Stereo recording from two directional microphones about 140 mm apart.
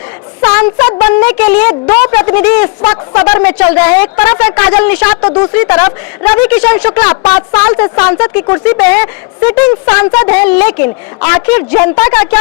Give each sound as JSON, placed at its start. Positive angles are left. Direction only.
{"t": 0.8, "sound": "a woman's voice", "side_deg": 20}
{"t": 2.8, "sound": "speech", "side_deg": 25}
{"t": 3.2, "sound": "a woman's voice", "side_deg": 15}